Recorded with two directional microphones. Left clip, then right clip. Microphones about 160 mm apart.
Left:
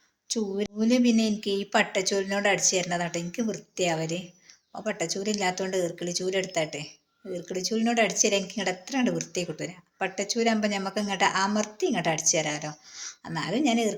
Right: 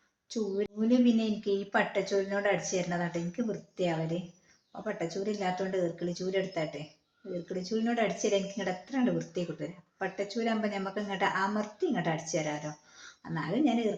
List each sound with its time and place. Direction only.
0.3 s a woman's voice: 30° left (ahead or behind)